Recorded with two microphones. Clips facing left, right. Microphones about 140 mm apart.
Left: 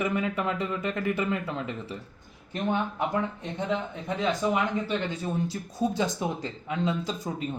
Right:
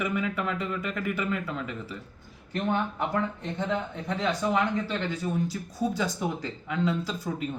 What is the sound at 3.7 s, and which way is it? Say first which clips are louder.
Speech: left 2 dB; 20° left (ahead or behind).